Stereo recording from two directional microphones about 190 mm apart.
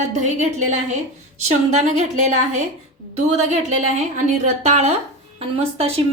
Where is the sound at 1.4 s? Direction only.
40° right (ahead or behind).